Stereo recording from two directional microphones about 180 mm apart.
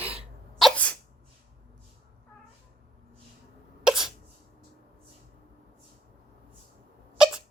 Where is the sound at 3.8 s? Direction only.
5° right (ahead or behind).